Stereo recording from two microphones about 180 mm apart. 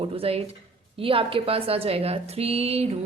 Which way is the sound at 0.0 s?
30° right (ahead or behind).